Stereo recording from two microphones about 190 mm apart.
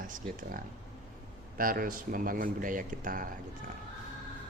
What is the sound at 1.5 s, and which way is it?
Speech, 50° right (ahead or behind).